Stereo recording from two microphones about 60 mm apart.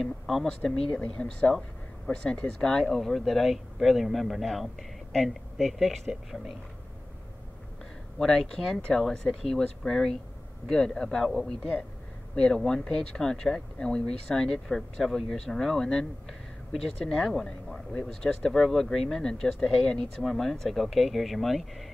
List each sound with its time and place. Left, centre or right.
0.0 s speech: centre
2.7 s speech: centre
8.2 s speech: centre